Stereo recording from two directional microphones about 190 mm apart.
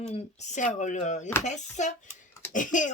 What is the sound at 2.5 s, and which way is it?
Cough, 40° left (ahead or behind).